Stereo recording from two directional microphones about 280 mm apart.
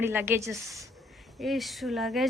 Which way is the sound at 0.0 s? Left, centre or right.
Centre.